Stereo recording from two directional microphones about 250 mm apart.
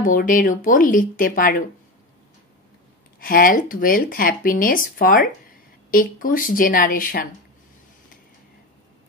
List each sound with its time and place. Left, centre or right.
0.0 s speech: left
3.2 s speech: left